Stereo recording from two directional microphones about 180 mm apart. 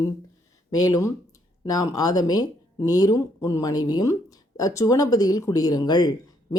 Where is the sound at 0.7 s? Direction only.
20° left (ahead or behind).